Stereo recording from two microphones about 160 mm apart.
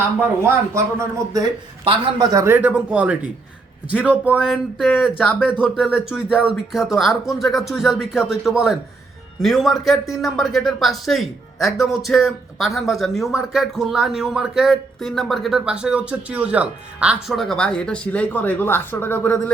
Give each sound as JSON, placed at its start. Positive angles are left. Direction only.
{"t": 0.2, "sound": "speech", "side_deg": -15}
{"t": 2.4, "sound": "speech", "side_deg": -10}
{"t": 5.7, "sound": "speech", "side_deg": 0}